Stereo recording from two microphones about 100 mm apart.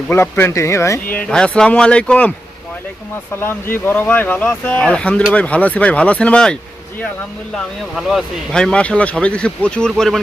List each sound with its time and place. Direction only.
0.1 s speech: 25° left (ahead or behind)
1.1 s speech: 10° left (ahead or behind)
3.4 s speech: 20° left (ahead or behind)